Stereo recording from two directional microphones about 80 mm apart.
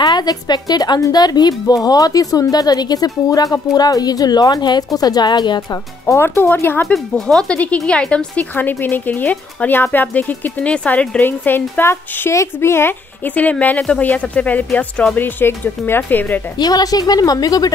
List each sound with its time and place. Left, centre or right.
0.0 s speech: left
5.7 s speech: left
6.2 s a woman's voice: left
6.9 s speech: centre
7.5 s a woman's voice: centre
13.3 s a woman's voice: centre
16.5 s a woman's voice: left